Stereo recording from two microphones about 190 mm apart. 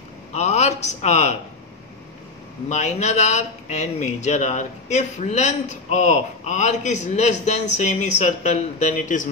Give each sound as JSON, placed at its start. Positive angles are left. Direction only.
{"t": 0.3, "sound": "a man's voice", "side_deg": 35}
{"t": 2.7, "sound": "a man's voice", "side_deg": 35}